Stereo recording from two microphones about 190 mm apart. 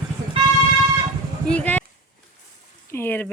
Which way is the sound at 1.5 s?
5° left (ahead or behind).